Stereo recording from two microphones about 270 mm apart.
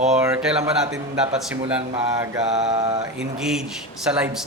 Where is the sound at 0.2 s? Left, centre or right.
Centre.